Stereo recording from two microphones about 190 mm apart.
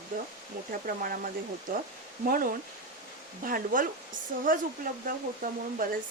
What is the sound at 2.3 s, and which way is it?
Speech, 50° right (ahead or behind).